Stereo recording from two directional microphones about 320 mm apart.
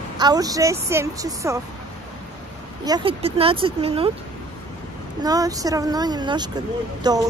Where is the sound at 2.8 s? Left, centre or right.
Centre.